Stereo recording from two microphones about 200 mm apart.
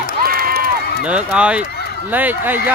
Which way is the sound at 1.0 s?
5° right (ahead or behind).